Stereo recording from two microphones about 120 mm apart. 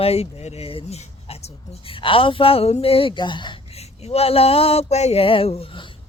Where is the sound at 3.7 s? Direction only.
60° left (ahead or behind).